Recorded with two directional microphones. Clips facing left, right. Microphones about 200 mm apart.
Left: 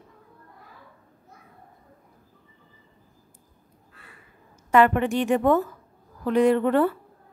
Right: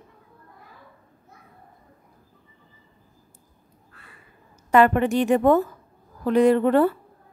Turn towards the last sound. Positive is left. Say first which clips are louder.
# right 2 dB
turn(degrees=-35)  # may be behind; listen again after turning